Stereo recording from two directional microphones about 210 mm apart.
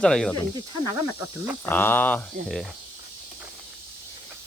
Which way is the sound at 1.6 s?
10° left (ahead or behind).